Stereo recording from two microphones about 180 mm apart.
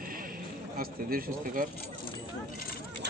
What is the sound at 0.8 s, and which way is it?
Speech, 55° right (ahead or behind).